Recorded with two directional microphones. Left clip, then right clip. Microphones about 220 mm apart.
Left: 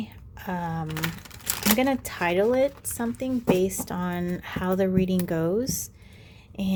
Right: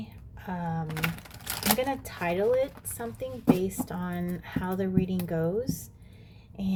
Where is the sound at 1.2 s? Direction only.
10° left (ahead or behind).